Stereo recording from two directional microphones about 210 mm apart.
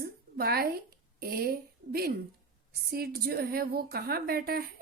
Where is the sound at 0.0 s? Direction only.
50° right (ahead or behind).